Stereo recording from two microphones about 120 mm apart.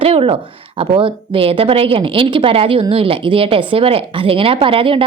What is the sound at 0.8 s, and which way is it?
A woman's voice, 45° right (ahead or behind).